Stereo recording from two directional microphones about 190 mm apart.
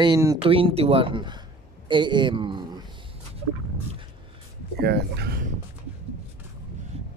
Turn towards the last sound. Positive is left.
turn(degrees=-55)  # may be behind; listen again after turning